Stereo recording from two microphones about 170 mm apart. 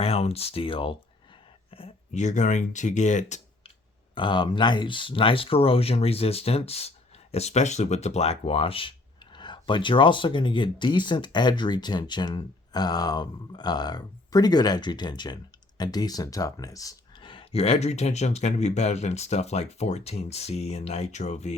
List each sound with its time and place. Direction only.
0.0 s speech: 35° left (ahead or behind)
4.1 s speech: 30° left (ahead or behind)